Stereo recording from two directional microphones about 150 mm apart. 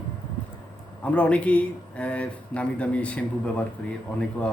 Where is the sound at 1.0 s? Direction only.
10° left (ahead or behind).